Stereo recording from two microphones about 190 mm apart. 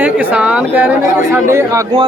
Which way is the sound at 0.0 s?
10° right (ahead or behind).